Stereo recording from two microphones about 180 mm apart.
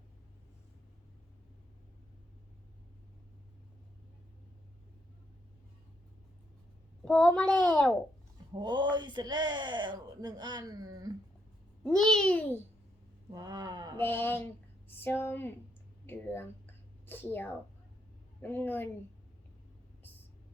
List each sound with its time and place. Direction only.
7.0 s child singing: 5° left (ahead or behind)
7.4 s a child's voice: 5° left (ahead or behind)
8.6 s speech: 25° right (ahead or behind)
11.8 s a child's voice: 5° left (ahead or behind)
13.3 s a sound: 20° right (ahead or behind)
13.9 s a child's voice: 10° left (ahead or behind)